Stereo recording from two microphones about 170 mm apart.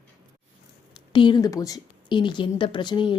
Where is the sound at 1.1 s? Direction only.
30° left (ahead or behind).